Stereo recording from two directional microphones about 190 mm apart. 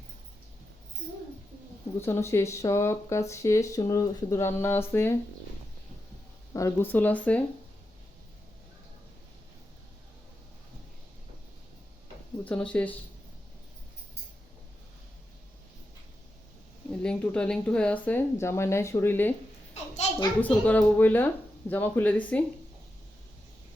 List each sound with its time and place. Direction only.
2.0 s speech: 15° left (ahead or behind)
6.5 s speech: 15° left (ahead or behind)
12.5 s speech: 5° left (ahead or behind)
17.0 s speech: 5° left (ahead or behind)
19.7 s a sound: 35° left (ahead or behind)
20.4 s speech: 10° left (ahead or behind)